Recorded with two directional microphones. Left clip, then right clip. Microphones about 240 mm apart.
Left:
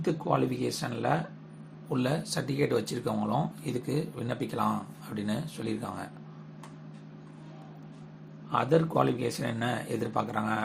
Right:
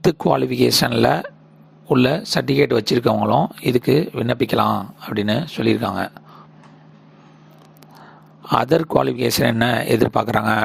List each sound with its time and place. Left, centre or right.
0.0 s speech: right
8.4 s speech: right